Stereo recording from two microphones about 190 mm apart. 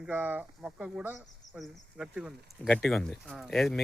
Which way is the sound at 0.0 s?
10° right (ahead or behind).